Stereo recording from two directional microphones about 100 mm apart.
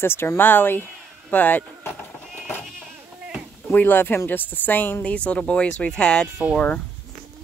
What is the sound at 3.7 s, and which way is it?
Speech, 20° left (ahead or behind).